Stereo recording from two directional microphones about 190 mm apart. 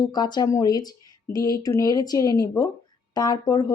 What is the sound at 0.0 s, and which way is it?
Speech, 20° left (ahead or behind).